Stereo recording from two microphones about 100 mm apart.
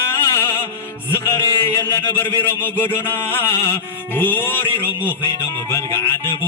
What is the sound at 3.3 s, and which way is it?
Music, 25° left (ahead or behind).